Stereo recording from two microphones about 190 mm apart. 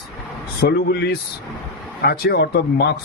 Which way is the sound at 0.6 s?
60° left (ahead or behind).